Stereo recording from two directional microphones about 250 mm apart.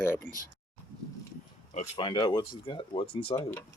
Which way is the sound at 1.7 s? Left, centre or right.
Centre.